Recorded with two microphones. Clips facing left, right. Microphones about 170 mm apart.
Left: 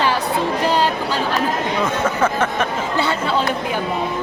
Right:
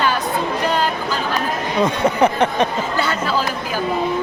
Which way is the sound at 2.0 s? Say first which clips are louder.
Right 3 dB; 15° right (ahead or behind).